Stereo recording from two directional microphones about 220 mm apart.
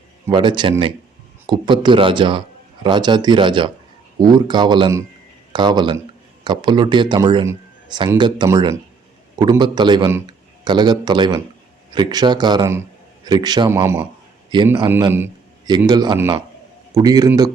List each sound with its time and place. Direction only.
0.3 s a man's voice: 20° right (ahead or behind)